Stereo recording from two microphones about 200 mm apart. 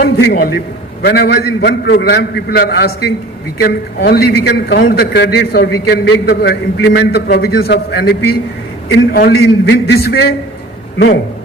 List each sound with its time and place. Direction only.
0.0 s a man's voice: 50° left (ahead or behind)